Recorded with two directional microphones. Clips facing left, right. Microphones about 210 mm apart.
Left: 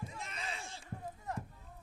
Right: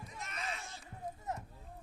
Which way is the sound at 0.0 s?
30° left (ahead or behind).